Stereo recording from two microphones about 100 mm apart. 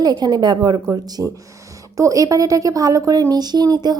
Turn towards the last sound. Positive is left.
turn(degrees=-40)  # may be behind; listen again after turning